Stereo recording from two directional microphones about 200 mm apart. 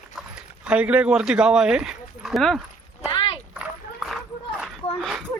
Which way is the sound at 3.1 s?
25° left (ahead or behind).